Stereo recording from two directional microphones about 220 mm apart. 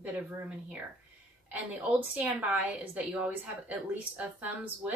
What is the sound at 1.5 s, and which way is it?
A woman's voice, 5° right (ahead or behind).